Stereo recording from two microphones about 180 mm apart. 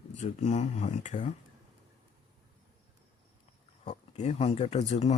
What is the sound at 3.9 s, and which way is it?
Speech, 35° left (ahead or behind).